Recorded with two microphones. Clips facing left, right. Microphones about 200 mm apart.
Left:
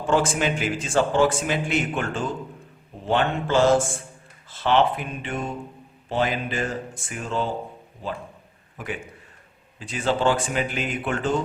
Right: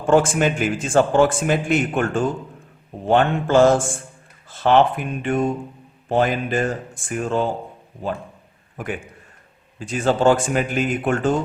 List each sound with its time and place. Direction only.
0.1 s a man's voice: 50° right (ahead or behind)
9.7 s a man's voice: 45° right (ahead or behind)